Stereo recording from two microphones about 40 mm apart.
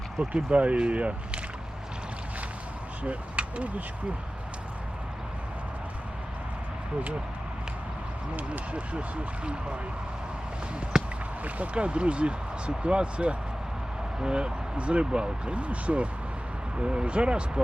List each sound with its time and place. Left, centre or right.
0.2 s speech: right
3.0 s speech: right
8.7 s speech: right
10.9 s a sound: centre
11.4 s speech: right